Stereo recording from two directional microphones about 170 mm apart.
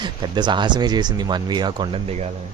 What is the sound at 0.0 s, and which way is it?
Speech, 25° right (ahead or behind).